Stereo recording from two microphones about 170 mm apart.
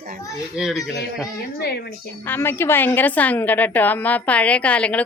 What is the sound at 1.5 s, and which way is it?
Speech, 70° left (ahead or behind).